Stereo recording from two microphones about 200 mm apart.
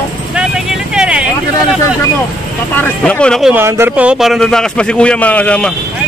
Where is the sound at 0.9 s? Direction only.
5° right (ahead or behind).